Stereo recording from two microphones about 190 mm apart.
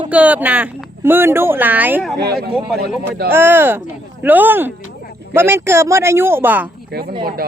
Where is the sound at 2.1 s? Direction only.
55° right (ahead or behind).